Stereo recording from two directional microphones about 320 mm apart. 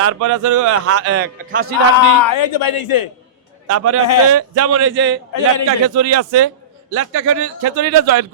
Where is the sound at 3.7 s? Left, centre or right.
Right.